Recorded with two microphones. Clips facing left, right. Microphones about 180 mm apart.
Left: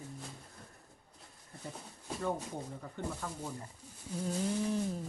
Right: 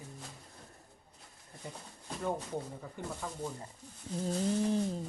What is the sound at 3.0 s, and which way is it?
Speech, 10° right (ahead or behind).